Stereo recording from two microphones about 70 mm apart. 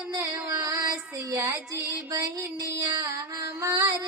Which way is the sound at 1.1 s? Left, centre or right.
Right.